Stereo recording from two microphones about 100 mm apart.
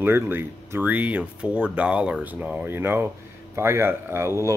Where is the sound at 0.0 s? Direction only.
20° right (ahead or behind).